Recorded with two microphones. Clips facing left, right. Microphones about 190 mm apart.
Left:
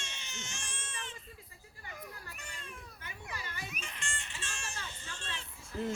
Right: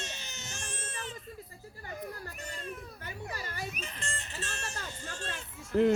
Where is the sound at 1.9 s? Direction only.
40° right (ahead or behind).